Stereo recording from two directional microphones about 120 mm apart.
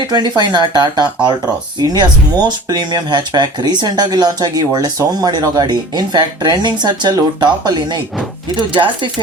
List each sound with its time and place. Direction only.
0.1 s speech: 35° right (ahead or behind)